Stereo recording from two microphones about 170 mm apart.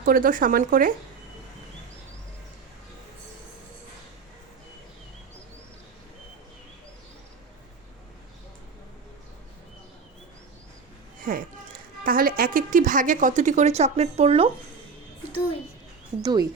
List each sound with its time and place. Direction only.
0.0 s speech: 55° right (ahead or behind)
11.3 s a woman's voice: 55° right (ahead or behind); by 14.5 s 35° right (ahead or behind)
16.2 s speech: 20° right (ahead or behind)